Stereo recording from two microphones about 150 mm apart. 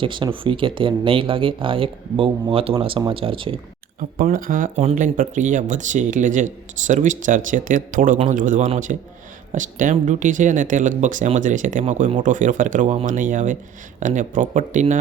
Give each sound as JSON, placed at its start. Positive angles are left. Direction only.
{"t": 0.0, "sound": "speech", "side_deg": -35}
{"t": 4.2, "sound": "speech", "side_deg": -70}
{"t": 4.8, "sound": "speech", "side_deg": -50}